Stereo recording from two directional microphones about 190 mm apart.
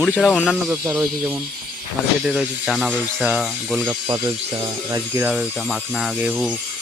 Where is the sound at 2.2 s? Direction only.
Centre (ahead or behind).